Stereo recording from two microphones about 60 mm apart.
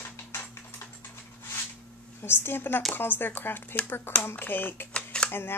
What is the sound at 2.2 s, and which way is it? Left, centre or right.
A woman's voice, left.